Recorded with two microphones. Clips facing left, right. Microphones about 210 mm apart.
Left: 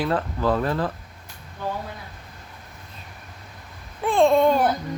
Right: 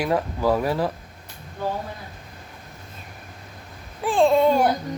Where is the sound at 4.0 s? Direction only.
5° right (ahead or behind).